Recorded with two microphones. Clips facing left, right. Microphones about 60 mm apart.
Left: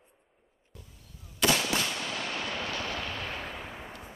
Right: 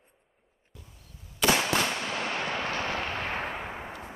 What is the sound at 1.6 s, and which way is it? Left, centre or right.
Fireworks, right.